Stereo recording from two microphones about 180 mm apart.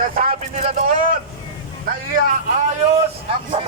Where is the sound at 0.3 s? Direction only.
35° right (ahead or behind).